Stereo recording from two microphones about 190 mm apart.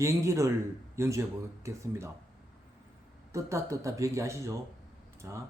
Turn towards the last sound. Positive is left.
turn(degrees=-15)  # may be behind; listen again after turning